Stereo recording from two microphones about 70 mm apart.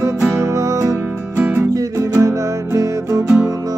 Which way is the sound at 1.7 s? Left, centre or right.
Right.